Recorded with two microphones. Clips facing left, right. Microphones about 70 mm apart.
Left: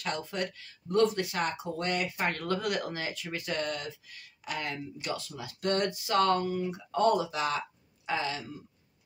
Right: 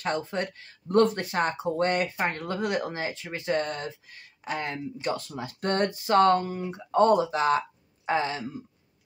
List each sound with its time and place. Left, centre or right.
0.0 s speech: right
2.1 s speech: right
5.1 s speech: right